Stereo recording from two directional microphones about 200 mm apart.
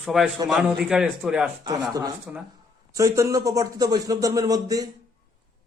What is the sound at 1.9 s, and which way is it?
A man's voice, 15° right (ahead or behind).